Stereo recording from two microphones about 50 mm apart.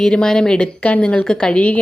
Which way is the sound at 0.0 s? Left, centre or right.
Centre.